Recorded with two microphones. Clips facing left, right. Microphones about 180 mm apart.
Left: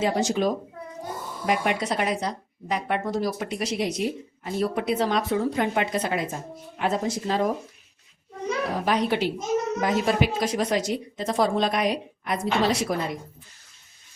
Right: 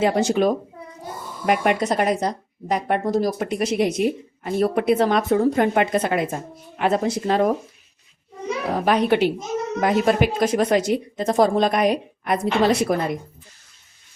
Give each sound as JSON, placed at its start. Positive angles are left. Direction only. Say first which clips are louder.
{"t": 0.0, "sound": "speech", "louder": "right 5 dB", "side_deg": -60}
{"t": 8.7, "sound": "a woman's voice", "louder": "right 7 dB", "side_deg": -60}